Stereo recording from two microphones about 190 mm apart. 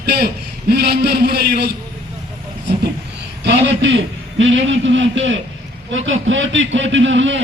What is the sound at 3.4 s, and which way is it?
A man's voice, 65° right (ahead or behind).